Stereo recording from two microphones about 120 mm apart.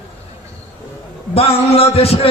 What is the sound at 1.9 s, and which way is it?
Music, 55° left (ahead or behind).